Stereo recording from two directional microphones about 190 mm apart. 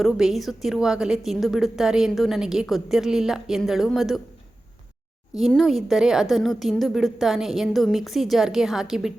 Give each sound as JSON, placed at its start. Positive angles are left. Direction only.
{"t": 0.0, "sound": "a woman's voice", "side_deg": 0}
{"t": 5.4, "sound": "a woman's voice", "side_deg": 0}